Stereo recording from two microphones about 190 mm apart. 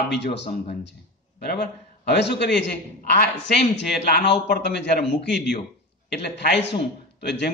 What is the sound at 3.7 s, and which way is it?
A man's voice, 65° left (ahead or behind).